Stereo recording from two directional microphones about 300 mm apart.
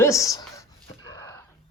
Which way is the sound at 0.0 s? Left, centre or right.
Centre.